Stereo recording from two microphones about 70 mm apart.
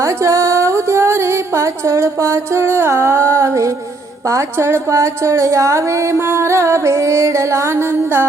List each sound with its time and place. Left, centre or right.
0.0 s music: right
4.3 s a woman's voice: right